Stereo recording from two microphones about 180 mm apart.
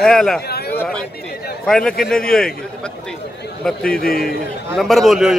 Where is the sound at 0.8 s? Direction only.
5° left (ahead or behind).